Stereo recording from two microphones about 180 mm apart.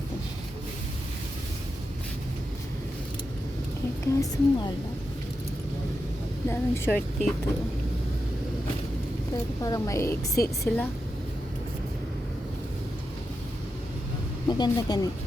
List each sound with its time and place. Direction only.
4.0 s speech: 20° left (ahead or behind)
6.5 s a woman's voice: 10° left (ahead or behind)
9.6 s a woman's voice: 20° left (ahead or behind)
14.4 s speech: 20° left (ahead or behind)